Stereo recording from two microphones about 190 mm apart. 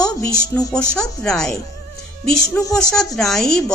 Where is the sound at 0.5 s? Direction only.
10° left (ahead or behind).